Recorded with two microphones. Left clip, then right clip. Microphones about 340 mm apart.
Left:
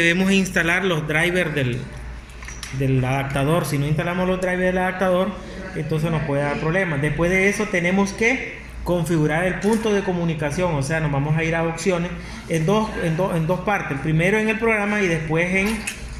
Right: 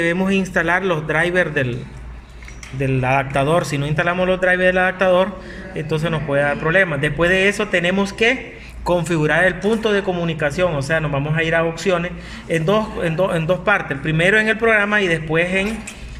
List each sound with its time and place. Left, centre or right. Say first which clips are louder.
0.0 s a man's voice: even; right
2.8 s a man's voice: right 5 dB; right